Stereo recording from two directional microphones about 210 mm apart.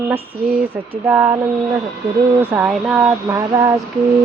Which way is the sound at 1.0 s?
10° right (ahead or behind).